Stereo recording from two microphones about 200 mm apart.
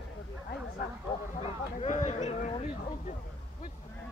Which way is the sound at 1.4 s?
35° left (ahead or behind).